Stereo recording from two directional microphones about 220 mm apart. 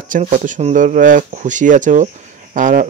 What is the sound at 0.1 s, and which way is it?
Speech, 35° right (ahead or behind).